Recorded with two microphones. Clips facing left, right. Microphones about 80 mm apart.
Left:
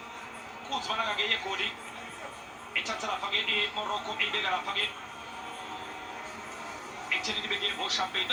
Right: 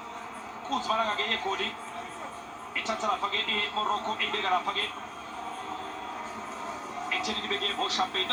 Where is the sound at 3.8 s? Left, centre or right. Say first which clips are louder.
Right 8 dB; right.